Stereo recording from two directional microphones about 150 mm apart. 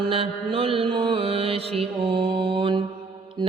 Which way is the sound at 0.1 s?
40° right (ahead or behind).